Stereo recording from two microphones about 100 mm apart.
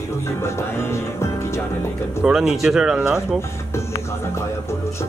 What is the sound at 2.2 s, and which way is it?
Speech, 5° right (ahead or behind).